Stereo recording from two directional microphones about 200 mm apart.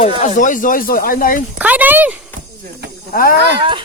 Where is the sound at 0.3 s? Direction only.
40° left (ahead or behind).